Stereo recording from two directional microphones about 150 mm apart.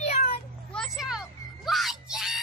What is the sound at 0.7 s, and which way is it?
Vehicle, centre (ahead or behind).